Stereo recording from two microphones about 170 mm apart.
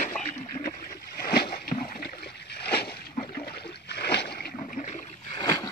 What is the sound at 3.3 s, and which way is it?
Toilet flush, 65° left (ahead or behind).